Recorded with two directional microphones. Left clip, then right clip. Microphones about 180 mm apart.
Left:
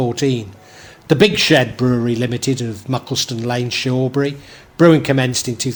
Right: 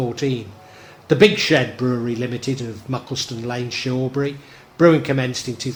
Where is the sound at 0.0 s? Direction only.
45° left (ahead or behind).